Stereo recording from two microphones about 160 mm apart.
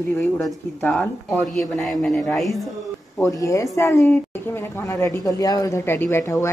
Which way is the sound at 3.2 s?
20° left (ahead or behind).